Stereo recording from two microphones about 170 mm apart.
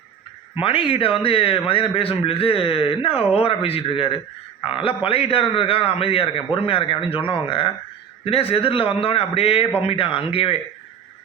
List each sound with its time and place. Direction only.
0.6 s a man's voice: 30° left (ahead or behind)